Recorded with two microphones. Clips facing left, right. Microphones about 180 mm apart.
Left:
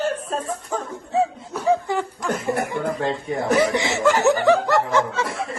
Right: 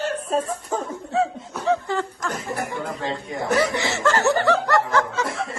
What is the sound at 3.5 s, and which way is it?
Snicker, 15° left (ahead or behind).